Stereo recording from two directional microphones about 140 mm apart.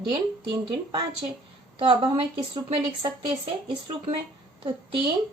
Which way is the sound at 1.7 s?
40° right (ahead or behind).